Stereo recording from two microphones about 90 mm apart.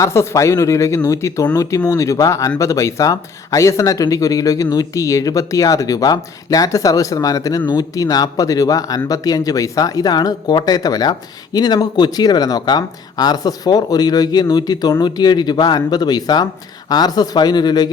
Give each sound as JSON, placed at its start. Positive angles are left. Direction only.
{"t": 0.0, "sound": "speech", "side_deg": 30}